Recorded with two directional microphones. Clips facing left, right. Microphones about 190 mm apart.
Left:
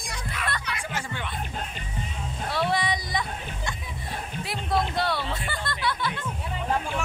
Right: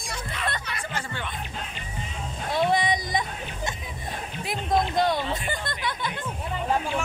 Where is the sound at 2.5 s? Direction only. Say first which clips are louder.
Right 3 dB; 20° right (ahead or behind).